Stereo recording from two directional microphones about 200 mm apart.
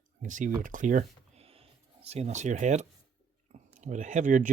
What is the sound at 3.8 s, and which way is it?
Speech, 40° right (ahead or behind).